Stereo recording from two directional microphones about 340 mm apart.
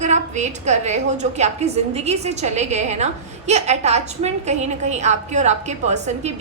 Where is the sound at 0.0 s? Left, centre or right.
Centre.